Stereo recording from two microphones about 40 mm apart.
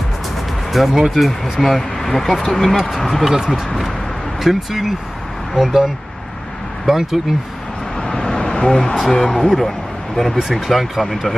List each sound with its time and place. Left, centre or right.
0.9 s speech: centre
3.3 s speech: centre
6.9 s speech: centre
8.0 s vehicle: centre
9.1 s speech: centre